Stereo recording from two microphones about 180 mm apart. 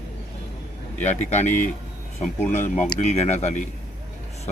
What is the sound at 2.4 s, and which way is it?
Speech, 40° left (ahead or behind).